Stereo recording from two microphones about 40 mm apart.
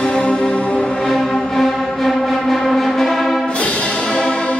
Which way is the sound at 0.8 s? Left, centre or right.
Centre.